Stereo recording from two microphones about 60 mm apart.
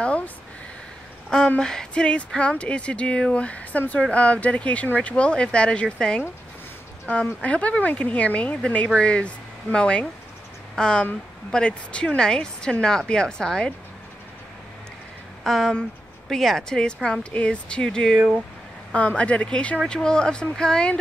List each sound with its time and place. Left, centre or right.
0.0 s a sound: left
1.6 s a woman's voice: centre
7.4 s a woman's voice: left
15.4 s a woman's voice: centre